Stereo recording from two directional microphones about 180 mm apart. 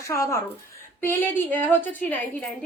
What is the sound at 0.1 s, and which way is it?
A child's voice, 15° left (ahead or behind).